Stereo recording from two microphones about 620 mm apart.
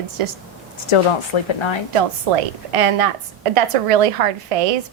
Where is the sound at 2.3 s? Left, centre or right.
Right.